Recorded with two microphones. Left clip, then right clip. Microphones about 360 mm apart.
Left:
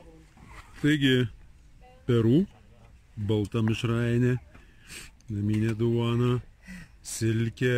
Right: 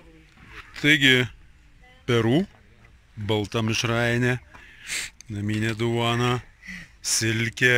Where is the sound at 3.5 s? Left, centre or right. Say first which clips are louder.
Right 6 dB; centre.